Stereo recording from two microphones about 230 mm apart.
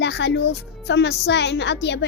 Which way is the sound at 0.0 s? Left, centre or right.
Left.